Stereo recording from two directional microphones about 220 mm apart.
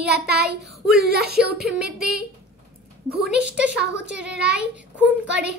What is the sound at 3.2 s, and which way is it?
Speech, 5° right (ahead or behind).